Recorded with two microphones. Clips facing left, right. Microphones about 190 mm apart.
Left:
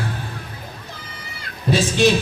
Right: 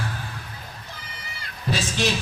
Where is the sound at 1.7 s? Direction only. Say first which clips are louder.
Left 8 dB; 20° left (ahead or behind).